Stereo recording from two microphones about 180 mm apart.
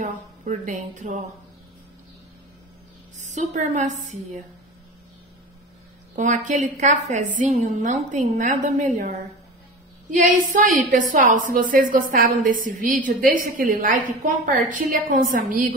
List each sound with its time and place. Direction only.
0.0 s a woman's voice: 45° right (ahead or behind)
3.2 s a woman's voice: 40° right (ahead or behind)
6.1 s a woman's voice: 45° right (ahead or behind)